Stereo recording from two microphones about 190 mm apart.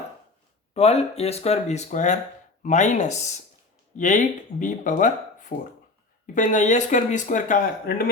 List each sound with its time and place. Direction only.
0.7 s speech: 35° left (ahead or behind); by 8.1 s 50° left (ahead or behind)